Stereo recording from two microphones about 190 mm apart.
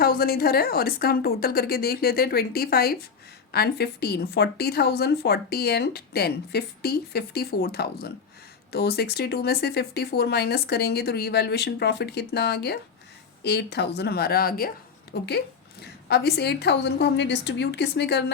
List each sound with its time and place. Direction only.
0.0 s a woman's voice: 50° left (ahead or behind)
15.1 s a woman's voice: 60° left (ahead or behind)